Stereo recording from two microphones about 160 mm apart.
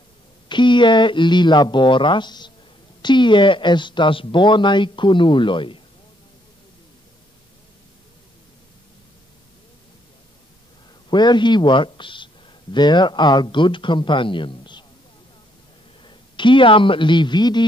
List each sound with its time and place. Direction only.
0.5 s speech: 30° left (ahead or behind)
11.1 s speech: 30° left (ahead or behind)
16.0 s speech: 30° left (ahead or behind)